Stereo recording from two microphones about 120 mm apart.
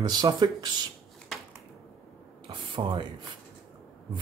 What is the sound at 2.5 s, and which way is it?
Speech, 40° right (ahead or behind).